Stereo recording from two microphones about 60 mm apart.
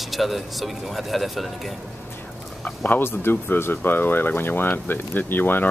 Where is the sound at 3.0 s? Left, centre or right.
Left.